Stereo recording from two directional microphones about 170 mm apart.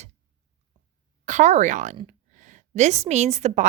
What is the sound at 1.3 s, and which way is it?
A woman's voice, 45° right (ahead or behind).